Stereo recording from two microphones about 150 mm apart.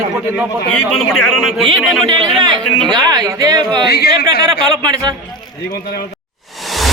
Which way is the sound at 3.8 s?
90° left.